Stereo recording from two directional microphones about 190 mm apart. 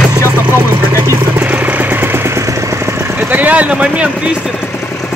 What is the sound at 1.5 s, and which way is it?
Vehicle, 10° right (ahead or behind).